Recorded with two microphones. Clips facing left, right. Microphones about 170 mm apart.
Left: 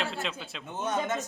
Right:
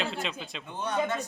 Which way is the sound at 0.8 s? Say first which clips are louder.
Right 1 dB; 20° left (ahead or behind).